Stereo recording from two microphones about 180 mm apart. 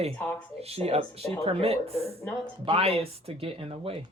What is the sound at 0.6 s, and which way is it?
Speech, 35° right (ahead or behind).